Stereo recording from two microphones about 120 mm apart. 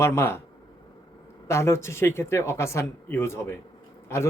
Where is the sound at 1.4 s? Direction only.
25° left (ahead or behind).